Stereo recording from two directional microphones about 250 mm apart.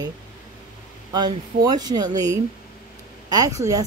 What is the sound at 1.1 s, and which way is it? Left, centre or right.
Speech, centre.